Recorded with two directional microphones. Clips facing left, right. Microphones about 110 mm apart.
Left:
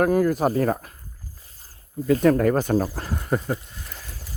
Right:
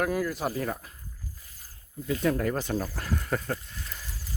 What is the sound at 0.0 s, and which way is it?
Speech, 45° left (ahead or behind).